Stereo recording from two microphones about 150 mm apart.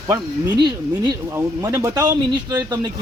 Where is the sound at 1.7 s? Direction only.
20° right (ahead or behind).